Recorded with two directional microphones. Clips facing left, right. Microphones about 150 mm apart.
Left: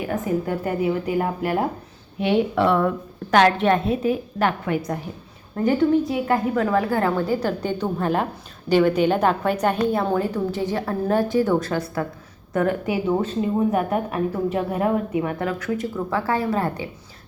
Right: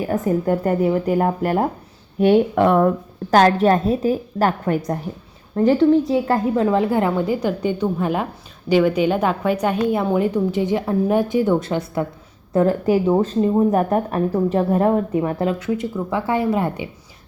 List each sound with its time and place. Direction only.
0.0 s a woman's voice: 40° right (ahead or behind); by 12.0 s 25° right (ahead or behind)
12.5 s a woman's voice: 35° right (ahead or behind)
15.2 s a woman's voice: 30° right (ahead or behind)